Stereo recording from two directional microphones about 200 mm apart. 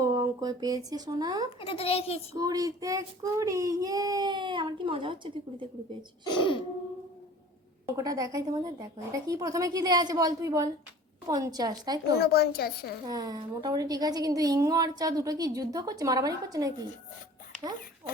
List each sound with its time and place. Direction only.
0.0 s speech: 15° right (ahead or behind)
1.5 s a child's voice: 30° left (ahead or behind)
2.3 s child singing: 15° right (ahead or behind)
6.2 s a child's voice: 25° left (ahead or behind)
7.9 s child singing: 20° right (ahead or behind)
11.3 s a woman's voice: 20° right (ahead or behind)
12.1 s a woman's voice: 50° left (ahead or behind)
13.1 s a woman's voice: 20° right (ahead or behind)